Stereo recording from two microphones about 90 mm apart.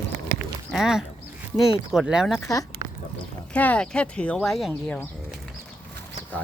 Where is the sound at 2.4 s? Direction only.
35° left (ahead or behind).